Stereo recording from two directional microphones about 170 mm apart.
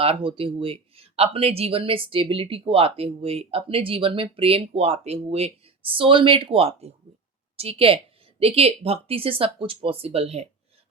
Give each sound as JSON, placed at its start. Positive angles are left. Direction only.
{"t": 0.0, "sound": "a woman's voice", "side_deg": -35}